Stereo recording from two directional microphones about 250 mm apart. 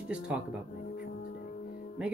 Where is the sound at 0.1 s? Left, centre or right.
Centre.